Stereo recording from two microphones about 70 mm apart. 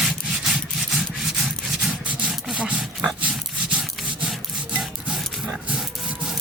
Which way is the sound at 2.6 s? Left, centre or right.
Centre.